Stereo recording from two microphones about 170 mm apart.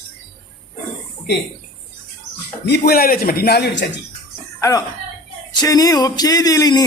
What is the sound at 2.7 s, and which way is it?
A man's voice, 60° left (ahead or behind).